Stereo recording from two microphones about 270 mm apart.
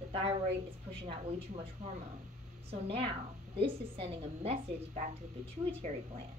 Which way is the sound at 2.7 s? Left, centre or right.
Right.